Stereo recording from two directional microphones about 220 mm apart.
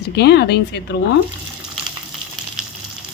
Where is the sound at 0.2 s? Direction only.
50° left (ahead or behind).